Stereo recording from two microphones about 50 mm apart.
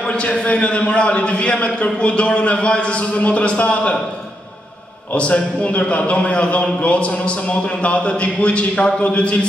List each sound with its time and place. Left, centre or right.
0.0 s a man's voice: left
5.1 s a man's voice: left